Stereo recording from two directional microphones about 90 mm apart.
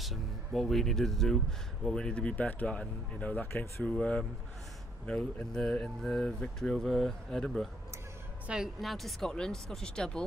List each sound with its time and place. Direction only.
0.0 s speech: centre (ahead or behind); by 3.8 s 25° left (ahead or behind)
3.8 s speech: 10° left (ahead or behind)
8.4 s speech: 5° right (ahead or behind)